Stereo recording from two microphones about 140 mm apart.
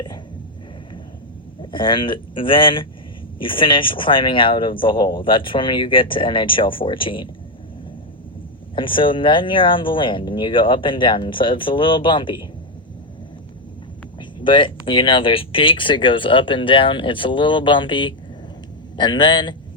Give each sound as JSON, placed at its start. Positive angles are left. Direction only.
{"t": 1.7, "sound": "speech", "side_deg": 35}
{"t": 8.7, "sound": "speech", "side_deg": 35}
{"t": 14.2, "sound": "speech", "side_deg": 35}